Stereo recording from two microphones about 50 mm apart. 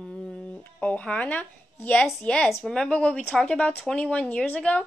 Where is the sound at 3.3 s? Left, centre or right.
Centre.